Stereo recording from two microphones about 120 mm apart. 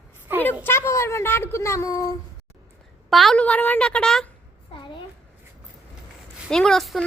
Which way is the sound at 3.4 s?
15° left (ahead or behind).